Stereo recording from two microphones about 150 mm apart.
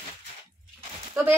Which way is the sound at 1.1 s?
15° right (ahead or behind).